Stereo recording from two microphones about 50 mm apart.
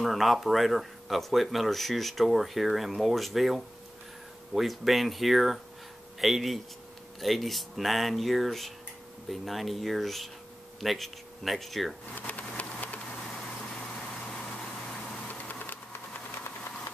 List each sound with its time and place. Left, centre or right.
0.0 s speech: centre
12.2 s a sound: left
13.7 s vehicle: centre
15.2 s vehicle: left
15.6 s engine: left